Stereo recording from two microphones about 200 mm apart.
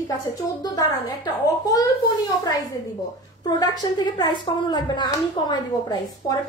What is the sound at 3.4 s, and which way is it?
A woman's voice, 20° left (ahead or behind).